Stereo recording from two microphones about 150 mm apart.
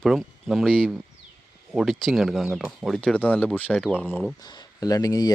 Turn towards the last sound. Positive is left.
turn(degrees=25)  # may be behind; listen again after turning